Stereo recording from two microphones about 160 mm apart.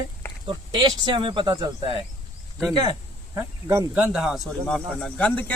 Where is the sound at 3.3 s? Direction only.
15° right (ahead or behind).